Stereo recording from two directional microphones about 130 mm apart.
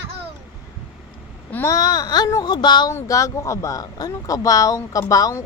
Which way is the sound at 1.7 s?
30° left (ahead or behind).